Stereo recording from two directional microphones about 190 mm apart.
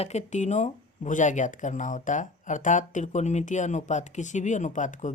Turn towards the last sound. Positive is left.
turn(degrees=40)  # may be behind; listen again after turning